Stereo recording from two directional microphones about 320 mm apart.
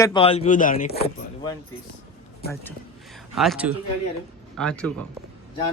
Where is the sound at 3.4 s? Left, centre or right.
Centre.